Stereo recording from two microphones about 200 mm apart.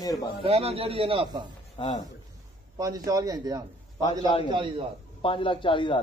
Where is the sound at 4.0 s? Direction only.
25° left (ahead or behind).